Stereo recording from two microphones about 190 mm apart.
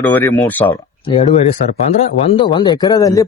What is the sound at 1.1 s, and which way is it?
A man's voice, 30° left (ahead or behind).